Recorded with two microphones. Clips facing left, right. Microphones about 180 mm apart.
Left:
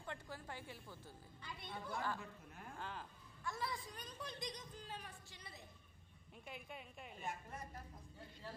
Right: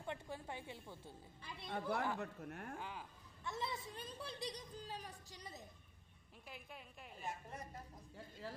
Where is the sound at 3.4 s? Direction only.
20° right (ahead or behind); by 5.6 s 40° right (ahead or behind).